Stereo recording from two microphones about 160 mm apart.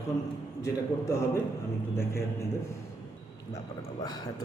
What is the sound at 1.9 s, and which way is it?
Speech, 15° left (ahead or behind).